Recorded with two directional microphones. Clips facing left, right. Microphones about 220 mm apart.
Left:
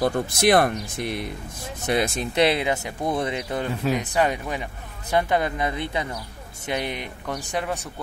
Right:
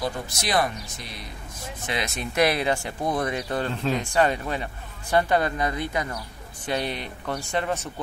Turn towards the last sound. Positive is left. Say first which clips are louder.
# right 1 dB
turn(degrees=15)  # may be behind; listen again after turning